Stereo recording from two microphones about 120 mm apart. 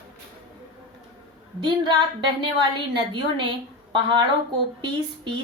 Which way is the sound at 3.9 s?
40° right (ahead or behind).